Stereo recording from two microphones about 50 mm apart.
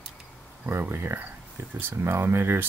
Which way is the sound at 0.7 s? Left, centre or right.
Right.